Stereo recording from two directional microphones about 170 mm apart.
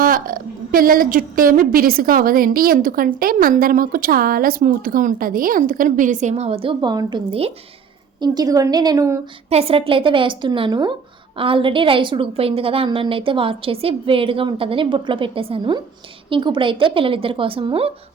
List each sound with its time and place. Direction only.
0.0 s a woman's voice: 55° right (ahead or behind); by 7.5 s 35° right (ahead or behind)
8.2 s a woman's voice: 20° right (ahead or behind)
9.5 s a woman's voice: 35° right (ahead or behind)